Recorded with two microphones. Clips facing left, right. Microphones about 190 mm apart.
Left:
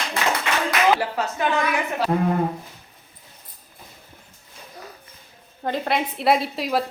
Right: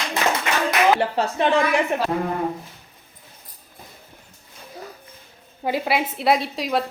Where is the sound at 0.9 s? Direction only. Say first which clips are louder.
Right 4 dB; 30° right (ahead or behind).